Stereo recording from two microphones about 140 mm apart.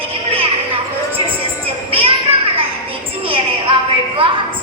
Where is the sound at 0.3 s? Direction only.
40° right (ahead or behind).